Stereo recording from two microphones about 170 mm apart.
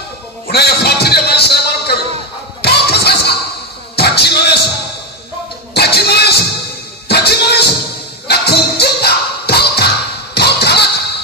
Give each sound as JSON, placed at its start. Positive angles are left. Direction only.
{"t": 0.5, "sound": "a sound", "side_deg": 70}
{"t": 3.9, "sound": "basketball bounce", "side_deg": 70}
{"t": 5.8, "sound": "music", "side_deg": 70}
{"t": 10.3, "sound": "basketball bounce", "side_deg": 75}